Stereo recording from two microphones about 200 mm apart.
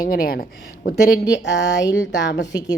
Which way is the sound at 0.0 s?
45° left (ahead or behind).